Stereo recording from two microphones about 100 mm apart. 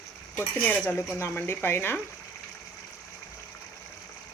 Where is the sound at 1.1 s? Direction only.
25° left (ahead or behind).